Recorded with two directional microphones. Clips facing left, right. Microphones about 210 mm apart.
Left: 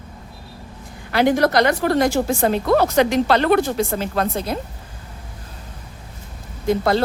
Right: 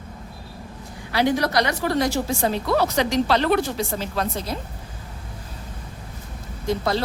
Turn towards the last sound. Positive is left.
turn(degrees=55)  # may be behind; listen again after turning